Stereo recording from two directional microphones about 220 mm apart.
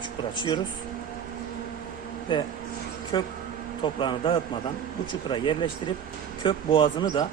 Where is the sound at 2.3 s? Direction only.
20° left (ahead or behind).